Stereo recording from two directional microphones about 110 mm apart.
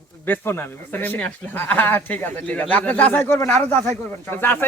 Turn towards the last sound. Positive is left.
turn(degrees=20)  # may be behind; listen again after turning